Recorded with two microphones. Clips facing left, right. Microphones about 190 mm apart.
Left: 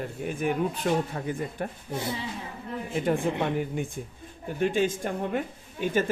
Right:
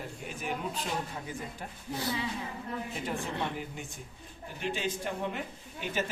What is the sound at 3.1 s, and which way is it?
Speech, 55° left (ahead or behind).